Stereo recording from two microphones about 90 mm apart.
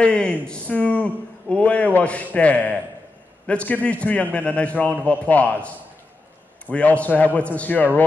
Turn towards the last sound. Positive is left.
turn(degrees=15)  # may be behind; listen again after turning